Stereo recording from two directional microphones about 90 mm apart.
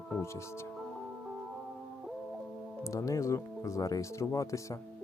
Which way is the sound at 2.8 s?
35° left (ahead or behind).